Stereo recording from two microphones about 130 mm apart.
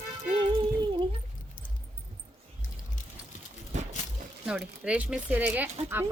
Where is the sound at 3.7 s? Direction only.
65° right (ahead or behind).